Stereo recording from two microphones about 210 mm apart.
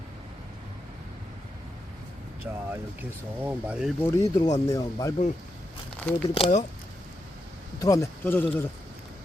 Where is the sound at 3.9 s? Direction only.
15° left (ahead or behind).